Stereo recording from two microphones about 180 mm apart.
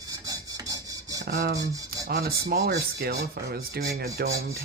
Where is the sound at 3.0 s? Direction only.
60° right (ahead or behind).